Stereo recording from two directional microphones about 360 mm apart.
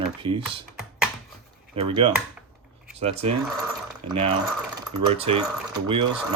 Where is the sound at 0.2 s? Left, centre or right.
Centre.